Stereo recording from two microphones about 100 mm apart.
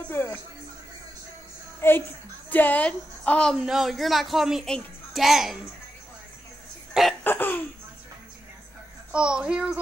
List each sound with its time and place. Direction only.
0.1 s speech: 25° left (ahead or behind)
1.8 s a woman's voice: 20° left (ahead or behind)
3.6 s a child's voice: 5° right (ahead or behind)
6.9 s cough: centre (ahead or behind)
7.2 s laughter: 20° left (ahead or behind)
9.1 s speech: 10° right (ahead or behind)